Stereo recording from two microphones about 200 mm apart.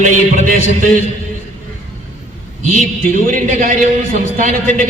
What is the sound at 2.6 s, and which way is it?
A man's voice, 45° right (ahead or behind).